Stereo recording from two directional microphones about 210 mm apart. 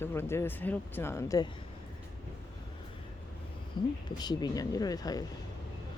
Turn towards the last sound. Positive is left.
turn(degrees=20)  # may be behind; listen again after turning